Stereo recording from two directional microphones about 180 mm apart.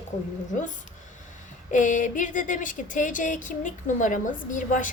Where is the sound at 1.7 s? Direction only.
45° left (ahead or behind).